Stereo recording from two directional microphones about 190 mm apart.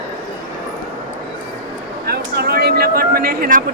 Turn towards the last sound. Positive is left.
turn(degrees=-50)  # may be behind; listen again after turning